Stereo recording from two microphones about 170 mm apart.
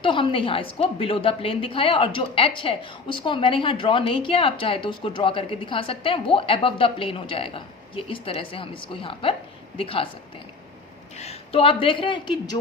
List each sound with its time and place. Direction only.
0.0 s a woman's voice: 30° left (ahead or behind)
11.2 s a woman's voice: 35° left (ahead or behind)